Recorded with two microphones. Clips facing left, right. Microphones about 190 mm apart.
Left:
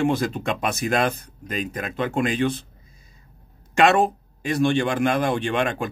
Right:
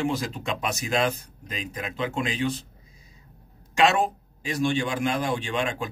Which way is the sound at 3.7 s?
55° left (ahead or behind).